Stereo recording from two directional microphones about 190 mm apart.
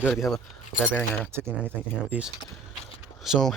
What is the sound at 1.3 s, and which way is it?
Speech, 10° right (ahead or behind).